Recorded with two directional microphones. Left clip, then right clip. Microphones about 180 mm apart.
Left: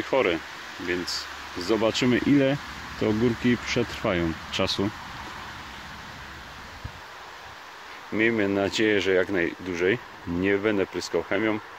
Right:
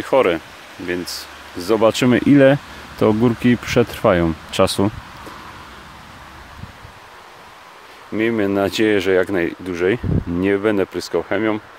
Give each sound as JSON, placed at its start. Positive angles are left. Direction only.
{"t": 0.1, "sound": "speech", "side_deg": -35}
{"t": 8.1, "sound": "speech", "side_deg": -25}